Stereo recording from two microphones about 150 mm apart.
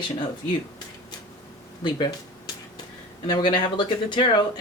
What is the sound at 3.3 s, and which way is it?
Speech, 30° left (ahead or behind).